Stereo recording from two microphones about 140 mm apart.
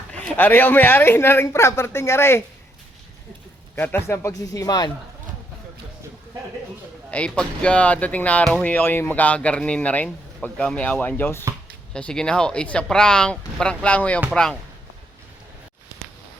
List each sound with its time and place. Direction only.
0.1 s speech: 10° left (ahead or behind)
3.8 s speech: 15° left (ahead or behind)
7.1 s speech: 10° left (ahead or behind)